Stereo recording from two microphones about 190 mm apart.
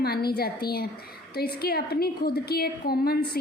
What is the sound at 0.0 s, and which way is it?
A woman's voice, 55° left (ahead or behind).